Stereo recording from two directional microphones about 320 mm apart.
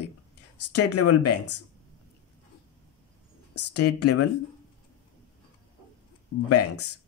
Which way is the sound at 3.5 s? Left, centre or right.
Left.